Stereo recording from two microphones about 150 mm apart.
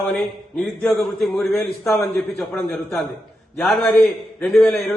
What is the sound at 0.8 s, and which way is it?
A man's voice, 5° left (ahead or behind).